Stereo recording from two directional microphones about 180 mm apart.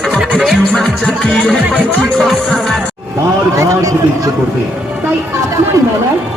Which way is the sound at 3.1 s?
15° right (ahead or behind).